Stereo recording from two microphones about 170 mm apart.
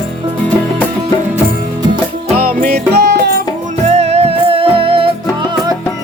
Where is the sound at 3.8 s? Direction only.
40° right (ahead or behind).